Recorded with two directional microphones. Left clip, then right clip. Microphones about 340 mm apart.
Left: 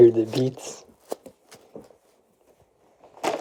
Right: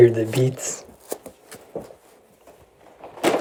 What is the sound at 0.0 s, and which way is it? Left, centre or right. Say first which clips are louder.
Chopping: right 1 dB; centre.